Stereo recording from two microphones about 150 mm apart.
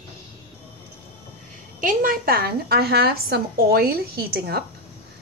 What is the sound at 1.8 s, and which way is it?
A woman's voice, 70° right (ahead or behind).